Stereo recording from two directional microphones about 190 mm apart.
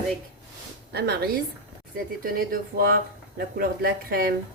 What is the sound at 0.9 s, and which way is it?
A woman's voice, 55° right (ahead or behind).